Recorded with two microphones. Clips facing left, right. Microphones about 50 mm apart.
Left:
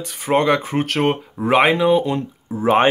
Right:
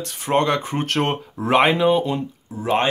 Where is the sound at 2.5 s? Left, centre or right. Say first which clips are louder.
Left 5 dB; left.